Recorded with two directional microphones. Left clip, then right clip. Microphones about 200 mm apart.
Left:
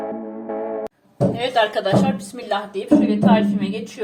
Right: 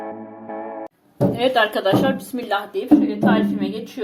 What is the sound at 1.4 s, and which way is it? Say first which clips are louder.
Speech: right 2 dB; 35° right (ahead or behind).